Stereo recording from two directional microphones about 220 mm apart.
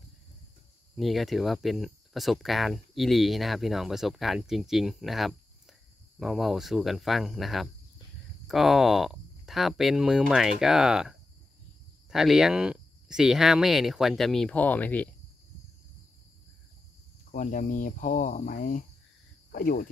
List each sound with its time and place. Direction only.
0.9 s speech: centre (ahead or behind)
17.3 s speech: 35° left (ahead or behind)